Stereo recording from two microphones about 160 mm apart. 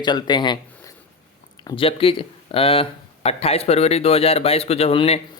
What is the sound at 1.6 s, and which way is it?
Speech, 35° left (ahead or behind).